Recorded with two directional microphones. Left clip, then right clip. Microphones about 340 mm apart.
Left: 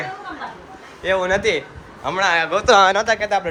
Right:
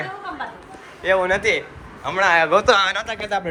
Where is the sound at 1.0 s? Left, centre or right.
Centre.